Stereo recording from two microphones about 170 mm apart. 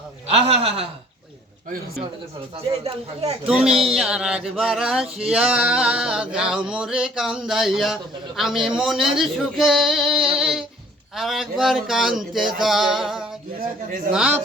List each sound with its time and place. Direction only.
0.3 s a man's voice: 35° right (ahead or behind)
2.8 s a man's voice: 40° right (ahead or behind)
3.4 s a sound: 5° right (ahead or behind)
14.1 s a man's voice: 5° right (ahead or behind)